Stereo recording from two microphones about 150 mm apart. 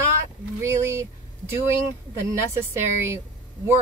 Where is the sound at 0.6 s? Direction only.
15° right (ahead or behind).